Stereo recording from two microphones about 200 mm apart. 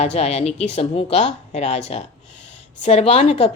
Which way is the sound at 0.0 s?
35° left (ahead or behind).